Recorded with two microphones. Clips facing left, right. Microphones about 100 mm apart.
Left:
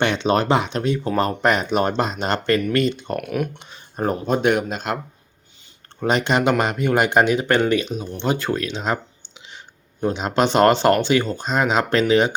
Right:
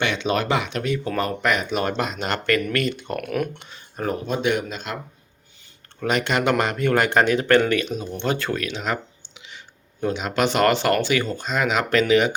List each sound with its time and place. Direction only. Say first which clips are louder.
0.0 s speech: left 4 dB; 35° left (ahead or behind)
3.2 s speech: left 1 dB; 5° left (ahead or behind)
3.6 s speech: left 2 dB; 20° left (ahead or behind)
4.0 s speech: left 4 dB; 45° left (ahead or behind)
6.0 s speech: left 3 dB; 25° left (ahead or behind)